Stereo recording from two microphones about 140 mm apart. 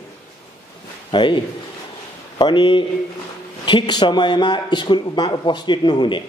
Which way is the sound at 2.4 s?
35° left (ahead or behind).